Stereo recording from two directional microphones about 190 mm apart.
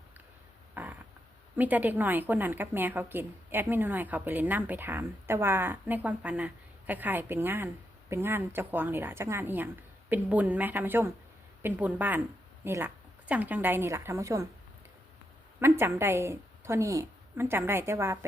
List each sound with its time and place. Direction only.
0.7 s a sound: 10° right (ahead or behind)
1.5 s a woman's voice: 10° right (ahead or behind)
15.8 s a woman's voice: 15° right (ahead or behind)